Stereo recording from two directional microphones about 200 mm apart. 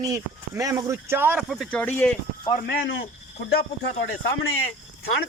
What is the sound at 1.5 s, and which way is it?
Speech, 5° left (ahead or behind).